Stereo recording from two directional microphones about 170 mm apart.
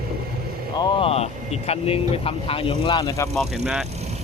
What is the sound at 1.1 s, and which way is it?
Speech, 40° left (ahead or behind).